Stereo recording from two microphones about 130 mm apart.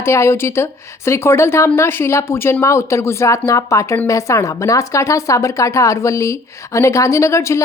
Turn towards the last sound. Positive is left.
turn(degrees=20)  # may be behind; listen again after turning